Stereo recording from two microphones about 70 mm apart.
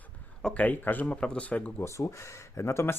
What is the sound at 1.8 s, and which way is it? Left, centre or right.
Speech, left.